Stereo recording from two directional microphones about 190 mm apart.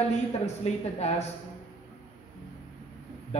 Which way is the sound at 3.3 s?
35° left (ahead or behind).